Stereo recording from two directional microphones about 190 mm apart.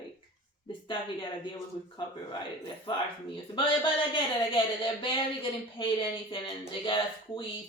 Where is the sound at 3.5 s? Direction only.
25° left (ahead or behind).